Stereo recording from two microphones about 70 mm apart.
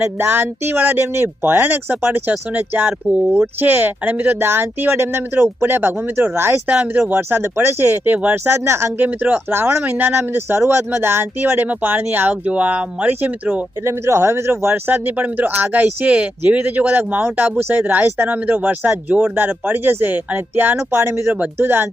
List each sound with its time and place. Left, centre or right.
0.0 s speech: right
6.7 s speech: right
7.1 s speech: right
8.4 s speech: right
9.0 s speech: right
9.5 s speech: right
12.3 s speech: centre
13.8 s speech: right
21.3 s speech: right